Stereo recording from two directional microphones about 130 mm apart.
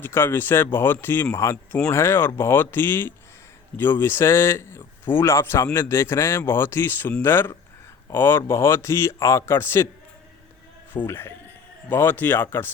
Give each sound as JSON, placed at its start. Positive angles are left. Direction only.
{"t": 0.0, "sound": "speech", "side_deg": 20}
{"t": 10.9, "sound": "speech", "side_deg": 15}